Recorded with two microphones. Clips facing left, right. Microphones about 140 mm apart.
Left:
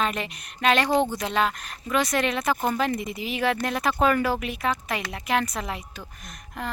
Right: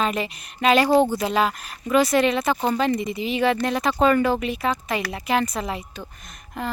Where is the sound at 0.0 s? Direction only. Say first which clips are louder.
Right 3 dB; centre (ahead or behind).